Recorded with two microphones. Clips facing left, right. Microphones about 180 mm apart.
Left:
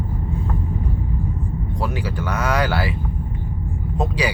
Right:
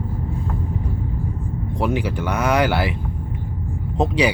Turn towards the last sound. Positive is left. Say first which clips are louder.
# right 4 dB
turn(degrees=-20)  # may be behind; listen again after turning